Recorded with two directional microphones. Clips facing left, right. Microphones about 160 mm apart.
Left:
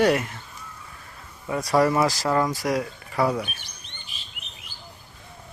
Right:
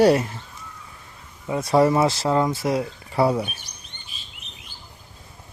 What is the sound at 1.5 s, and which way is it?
Speech, 25° right (ahead or behind).